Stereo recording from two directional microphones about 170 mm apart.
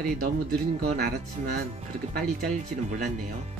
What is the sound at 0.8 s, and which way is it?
Speech, 65° right (ahead or behind).